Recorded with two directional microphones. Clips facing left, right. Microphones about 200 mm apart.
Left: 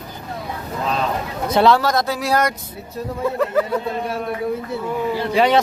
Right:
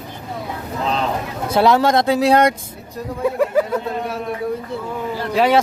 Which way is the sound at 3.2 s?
10° right (ahead or behind).